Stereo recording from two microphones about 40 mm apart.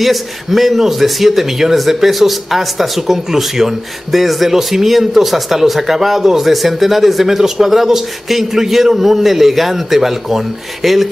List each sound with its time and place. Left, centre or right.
0.0 s a man's voice: centre